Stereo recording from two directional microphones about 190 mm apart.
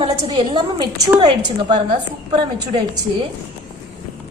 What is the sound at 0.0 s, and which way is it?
A woman's voice, 30° right (ahead or behind).